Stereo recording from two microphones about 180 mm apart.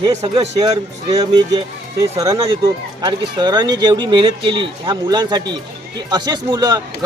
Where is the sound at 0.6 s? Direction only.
20° right (ahead or behind).